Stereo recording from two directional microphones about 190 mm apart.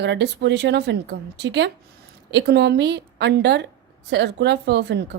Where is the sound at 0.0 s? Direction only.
65° right (ahead or behind).